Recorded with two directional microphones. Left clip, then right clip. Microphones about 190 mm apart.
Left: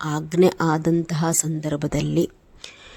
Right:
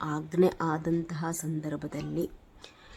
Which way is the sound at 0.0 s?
30° left (ahead or behind).